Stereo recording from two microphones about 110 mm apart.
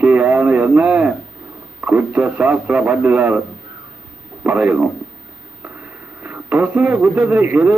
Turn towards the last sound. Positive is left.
turn(degrees=-15)  # may be behind; listen again after turning